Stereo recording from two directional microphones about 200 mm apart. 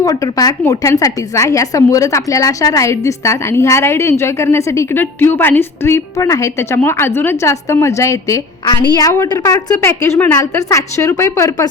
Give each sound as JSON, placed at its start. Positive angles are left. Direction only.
{"t": 0.0, "sound": "a woman's voice", "side_deg": 15}